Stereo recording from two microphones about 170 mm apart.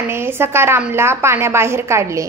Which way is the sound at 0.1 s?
15° right (ahead or behind).